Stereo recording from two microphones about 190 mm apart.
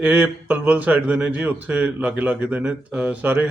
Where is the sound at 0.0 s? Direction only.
10° right (ahead or behind).